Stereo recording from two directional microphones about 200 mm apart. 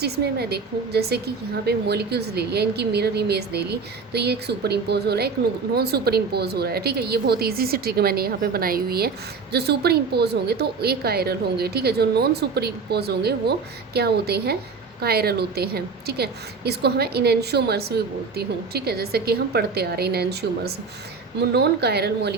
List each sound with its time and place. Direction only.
0.0 s a woman's voice: 55° right (ahead or behind)